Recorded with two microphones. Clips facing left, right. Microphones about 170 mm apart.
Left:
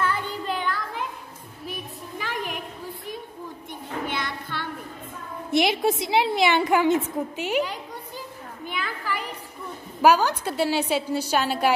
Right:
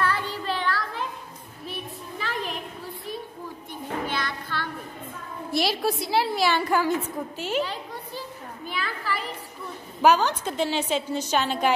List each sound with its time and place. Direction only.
0.0 s a sound: 20° left (ahead or behind)
4.2 s child singing: 20° left (ahead or behind)
5.5 s a woman's voice: 20° left (ahead or behind)
8.6 s children playing: 15° left (ahead or behind)
10.0 s a woman's voice: 10° left (ahead or behind)